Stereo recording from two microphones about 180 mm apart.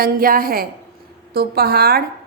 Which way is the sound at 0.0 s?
50° right (ahead or behind).